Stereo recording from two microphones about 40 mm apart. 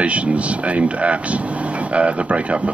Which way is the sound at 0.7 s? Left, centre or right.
Right.